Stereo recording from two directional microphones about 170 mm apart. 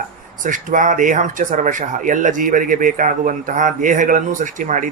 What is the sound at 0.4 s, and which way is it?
Speech, 50° right (ahead or behind).